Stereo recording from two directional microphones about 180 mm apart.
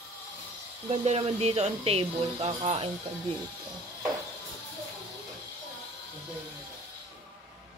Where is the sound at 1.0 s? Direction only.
35° right (ahead or behind).